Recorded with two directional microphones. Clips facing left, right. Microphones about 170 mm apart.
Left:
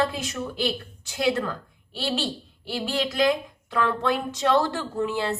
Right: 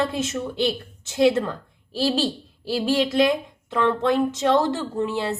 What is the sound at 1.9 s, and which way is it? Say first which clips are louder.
A woman's voice: right 6 dB; 35° right (ahead or behind).